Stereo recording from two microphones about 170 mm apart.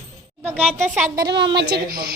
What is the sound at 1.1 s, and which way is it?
Speech, 80° right.